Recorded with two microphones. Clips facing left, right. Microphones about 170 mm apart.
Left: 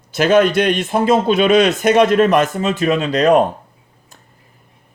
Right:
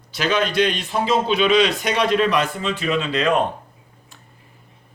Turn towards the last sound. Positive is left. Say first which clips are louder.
# left 6 dB
turn(degrees=40)  # may be behind; listen again after turning